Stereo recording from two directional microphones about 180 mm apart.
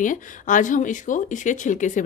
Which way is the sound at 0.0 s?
45° left (ahead or behind).